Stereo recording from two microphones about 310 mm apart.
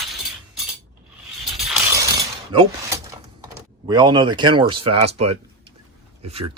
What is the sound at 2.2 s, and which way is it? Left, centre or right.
Mechanisms, centre.